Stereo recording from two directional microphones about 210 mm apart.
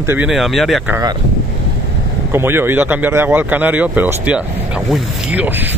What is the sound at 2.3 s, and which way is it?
Speech, 10° right (ahead or behind).